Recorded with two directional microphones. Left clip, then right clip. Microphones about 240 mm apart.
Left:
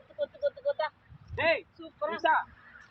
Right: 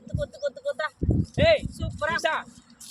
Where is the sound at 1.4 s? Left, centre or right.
Right.